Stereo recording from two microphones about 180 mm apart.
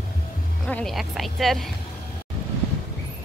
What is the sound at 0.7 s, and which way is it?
Speech, 5° left (ahead or behind).